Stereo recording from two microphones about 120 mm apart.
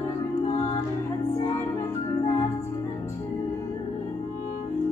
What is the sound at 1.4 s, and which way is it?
Music, 20° left (ahead or behind).